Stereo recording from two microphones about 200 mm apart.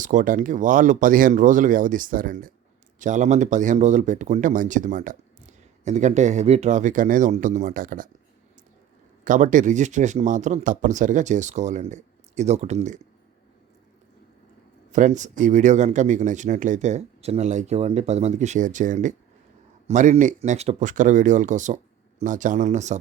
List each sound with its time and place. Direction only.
0.0 s speech: 40° right (ahead or behind)
9.2 s speech: 40° right (ahead or behind)
14.9 s speech: 35° right (ahead or behind)